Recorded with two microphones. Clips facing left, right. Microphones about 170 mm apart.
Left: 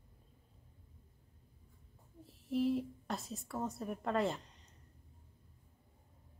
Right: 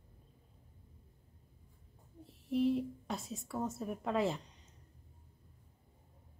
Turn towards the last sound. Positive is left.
turn(degrees=0)  # may be behind; listen again after turning